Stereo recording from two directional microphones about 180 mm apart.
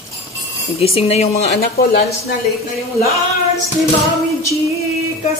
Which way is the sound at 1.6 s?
60° left (ahead or behind).